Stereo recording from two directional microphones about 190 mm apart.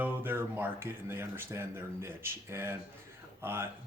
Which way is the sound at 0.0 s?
10° right (ahead or behind).